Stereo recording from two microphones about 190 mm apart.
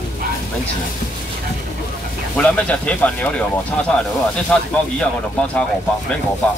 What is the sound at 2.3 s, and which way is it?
Speech, 5° left (ahead or behind).